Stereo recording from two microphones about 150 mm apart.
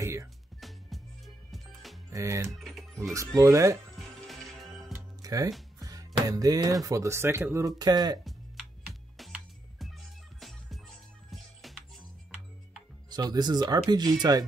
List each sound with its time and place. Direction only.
0.0 s music: 20° right (ahead or behind)
0.6 s music: centre (ahead or behind)
2.0 s speech: 20° right (ahead or behind)
2.5 s music: centre (ahead or behind)
3.0 s speech: 20° right (ahead or behind)
3.9 s music: centre (ahead or behind)
4.9 s music: 25° right (ahead or behind)
5.8 s speech: 25° right (ahead or behind)
9.1 s music: centre (ahead or behind)
13.1 s speech: 30° right (ahead or behind)